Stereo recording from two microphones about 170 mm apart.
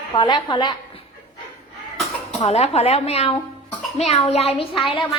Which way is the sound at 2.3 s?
40° left (ahead or behind).